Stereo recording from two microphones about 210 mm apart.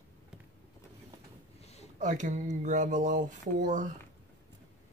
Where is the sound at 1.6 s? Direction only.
30° left (ahead or behind).